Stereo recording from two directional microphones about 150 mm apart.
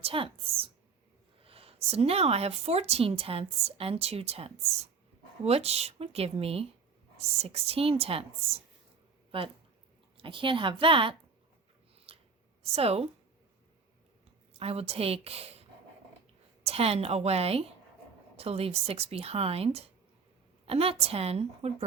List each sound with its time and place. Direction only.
0.0 s speech: 40° right (ahead or behind)
12.1 s a sound: 40° right (ahead or behind)
12.7 s speech: 40° right (ahead or behind)
14.6 s speech: 45° right (ahead or behind)
16.6 s speech: 40° right (ahead or behind)